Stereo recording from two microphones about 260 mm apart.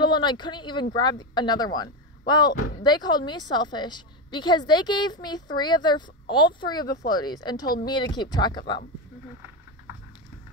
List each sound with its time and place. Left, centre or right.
0.0 s a woman's voice: centre